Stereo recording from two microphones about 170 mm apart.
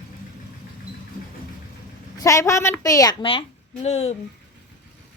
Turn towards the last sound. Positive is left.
turn(degrees=40)  # may be behind; listen again after turning